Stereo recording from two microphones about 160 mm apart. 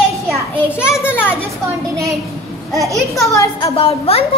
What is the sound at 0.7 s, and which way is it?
Speech, 5° right (ahead or behind).